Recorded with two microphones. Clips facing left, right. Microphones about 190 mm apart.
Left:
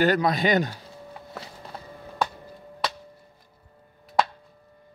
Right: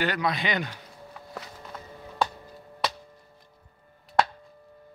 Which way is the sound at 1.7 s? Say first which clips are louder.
Left 2 dB; 30° left (ahead or behind).